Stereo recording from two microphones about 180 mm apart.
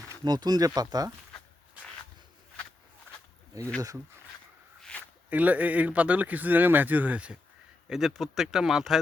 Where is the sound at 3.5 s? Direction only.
20° right (ahead or behind).